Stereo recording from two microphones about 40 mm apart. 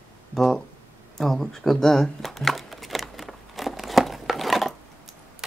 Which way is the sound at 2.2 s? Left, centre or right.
Centre.